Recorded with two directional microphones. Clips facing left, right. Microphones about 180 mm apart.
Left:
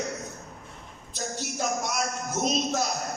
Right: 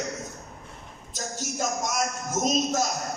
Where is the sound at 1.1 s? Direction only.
45° right (ahead or behind).